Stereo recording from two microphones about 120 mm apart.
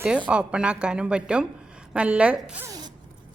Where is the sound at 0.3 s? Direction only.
10° right (ahead or behind).